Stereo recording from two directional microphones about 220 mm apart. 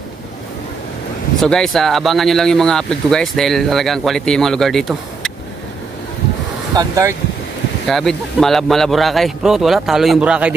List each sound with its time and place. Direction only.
1.4 s speech: centre (ahead or behind)
6.7 s speech: 15° right (ahead or behind)
7.8 s speech: centre (ahead or behind)